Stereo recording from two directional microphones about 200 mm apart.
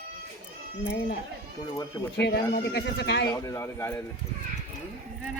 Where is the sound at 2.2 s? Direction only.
55° left (ahead or behind).